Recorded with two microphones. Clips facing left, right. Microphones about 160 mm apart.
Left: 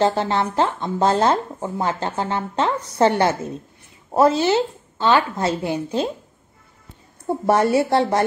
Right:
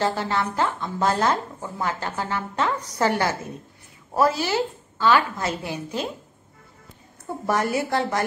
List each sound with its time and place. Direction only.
0.0 s speech: 25° left (ahead or behind)
7.2 s speech: 30° left (ahead or behind)